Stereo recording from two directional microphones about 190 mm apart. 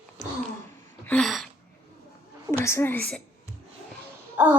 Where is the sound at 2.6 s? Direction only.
15° left (ahead or behind).